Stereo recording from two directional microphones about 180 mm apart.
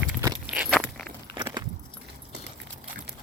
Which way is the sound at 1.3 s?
25° right (ahead or behind).